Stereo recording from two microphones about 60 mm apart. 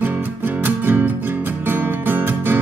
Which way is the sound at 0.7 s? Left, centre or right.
Right.